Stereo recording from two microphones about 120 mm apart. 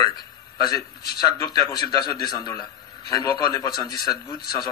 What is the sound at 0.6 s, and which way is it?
A man's voice, 35° left (ahead or behind).